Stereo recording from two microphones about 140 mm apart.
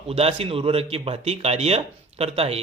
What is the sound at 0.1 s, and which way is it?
Speech, 45° right (ahead or behind).